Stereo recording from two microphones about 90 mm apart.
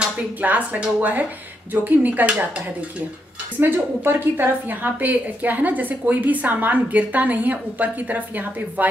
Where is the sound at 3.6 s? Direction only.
20° right (ahead or behind).